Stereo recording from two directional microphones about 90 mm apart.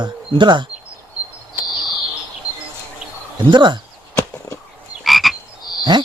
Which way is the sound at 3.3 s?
55° right (ahead or behind).